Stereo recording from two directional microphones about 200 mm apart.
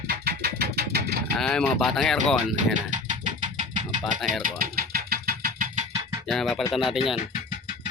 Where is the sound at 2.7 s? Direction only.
40° right (ahead or behind).